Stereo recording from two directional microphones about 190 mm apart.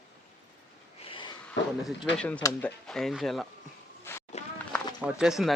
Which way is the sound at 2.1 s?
5° left (ahead or behind).